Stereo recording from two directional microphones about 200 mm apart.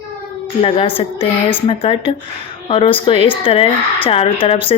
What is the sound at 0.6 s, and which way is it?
Speech, 30° left (ahead or behind).